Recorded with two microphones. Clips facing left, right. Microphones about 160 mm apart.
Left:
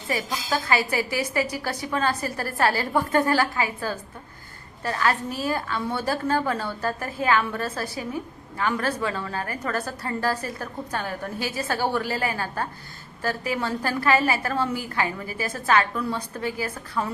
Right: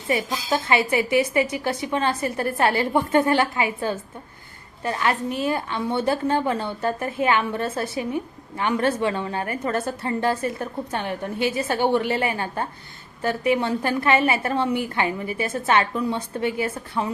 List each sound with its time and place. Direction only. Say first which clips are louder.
0.5 s a woman's voice: right 3 dB; 20° right (ahead or behind)